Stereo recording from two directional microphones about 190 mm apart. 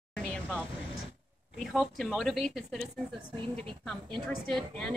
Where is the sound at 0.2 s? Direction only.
5° left (ahead or behind).